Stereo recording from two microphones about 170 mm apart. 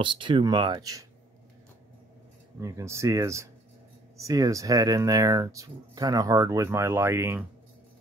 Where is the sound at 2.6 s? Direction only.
20° right (ahead or behind).